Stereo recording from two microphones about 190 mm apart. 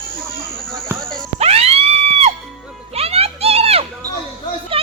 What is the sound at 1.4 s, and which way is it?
Music, 35° right (ahead or behind).